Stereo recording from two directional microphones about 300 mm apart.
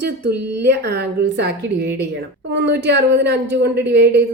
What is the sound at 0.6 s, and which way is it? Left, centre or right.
A woman's voice, right.